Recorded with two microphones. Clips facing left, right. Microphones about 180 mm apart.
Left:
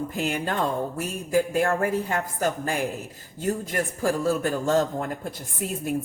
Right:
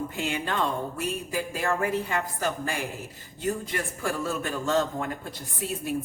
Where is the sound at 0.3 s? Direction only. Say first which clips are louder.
Left 2 dB; 45° left (ahead or behind).